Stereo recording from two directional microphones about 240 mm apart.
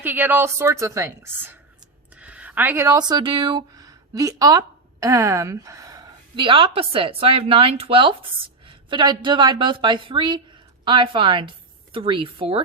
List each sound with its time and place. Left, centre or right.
0.0 s a woman's voice: centre